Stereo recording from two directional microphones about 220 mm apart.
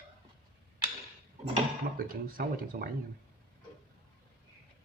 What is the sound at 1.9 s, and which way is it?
Speech, 40° right (ahead or behind).